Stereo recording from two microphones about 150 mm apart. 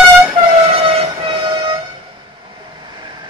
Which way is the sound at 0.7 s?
35° right (ahead or behind).